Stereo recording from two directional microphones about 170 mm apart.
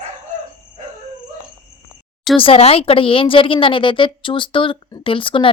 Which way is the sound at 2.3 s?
30° left (ahead or behind).